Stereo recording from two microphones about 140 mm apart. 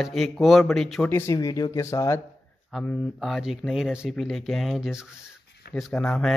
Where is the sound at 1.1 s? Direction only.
20° left (ahead or behind).